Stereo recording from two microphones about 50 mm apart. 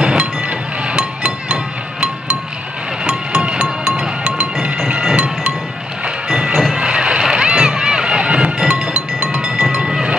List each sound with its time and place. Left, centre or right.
0.0 s chink: centre
3.0 s music: centre
4.8 s a sound: right
6.2 s music: centre
6.6 s a sound: centre
8.9 s music: centre